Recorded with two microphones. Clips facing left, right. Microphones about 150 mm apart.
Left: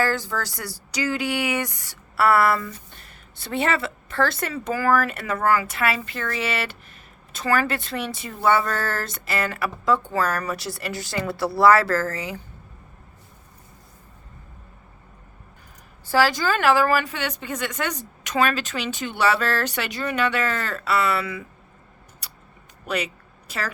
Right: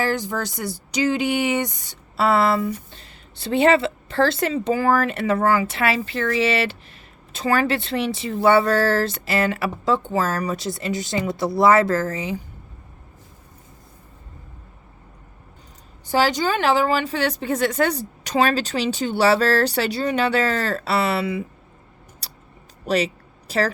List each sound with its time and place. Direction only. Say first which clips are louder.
0.0 s speech: right 1 dB; 20° right (ahead or behind)
3.3 s speech: right 7 dB; 25° right (ahead or behind)
7.4 s speech: right 3 dB; 25° right (ahead or behind)
16.0 s a woman's voice: right 1 dB; 20° right (ahead or behind)
22.9 s a sound: right 6 dB; 35° right (ahead or behind)